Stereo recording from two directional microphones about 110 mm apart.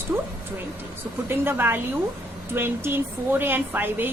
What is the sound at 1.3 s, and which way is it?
A woman's voice, 20° right (ahead or behind).